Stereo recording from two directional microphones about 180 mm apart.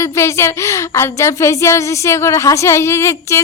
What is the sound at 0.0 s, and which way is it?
Speech, 15° left (ahead or behind).